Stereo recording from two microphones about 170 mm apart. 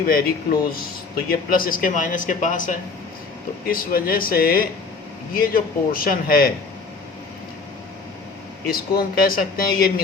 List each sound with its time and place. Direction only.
0.0 s speech: 60° left (ahead or behind)
8.6 s speech: 60° left (ahead or behind)